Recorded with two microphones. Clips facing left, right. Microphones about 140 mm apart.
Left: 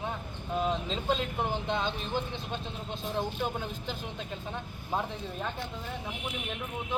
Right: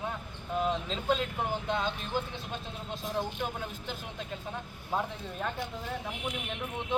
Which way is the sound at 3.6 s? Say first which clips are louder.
Left 2 dB; 5° right (ahead or behind).